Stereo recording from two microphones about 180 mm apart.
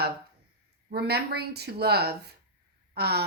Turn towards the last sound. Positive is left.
turn(degrees=-65)  # may be behind; listen again after turning